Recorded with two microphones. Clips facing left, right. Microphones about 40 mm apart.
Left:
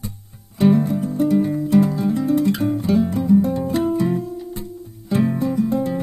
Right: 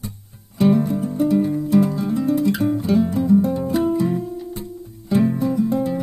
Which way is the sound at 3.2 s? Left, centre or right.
Centre.